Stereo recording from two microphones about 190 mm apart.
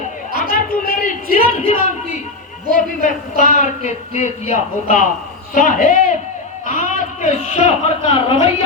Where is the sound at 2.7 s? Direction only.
45° left (ahead or behind).